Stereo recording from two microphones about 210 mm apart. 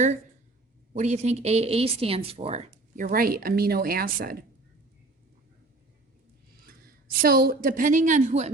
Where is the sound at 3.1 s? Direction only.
45° right (ahead or behind).